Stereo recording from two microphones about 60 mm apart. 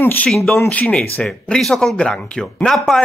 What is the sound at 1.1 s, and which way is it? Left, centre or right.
Speech, centre.